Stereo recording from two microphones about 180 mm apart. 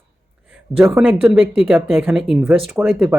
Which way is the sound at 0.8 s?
10° right (ahead or behind).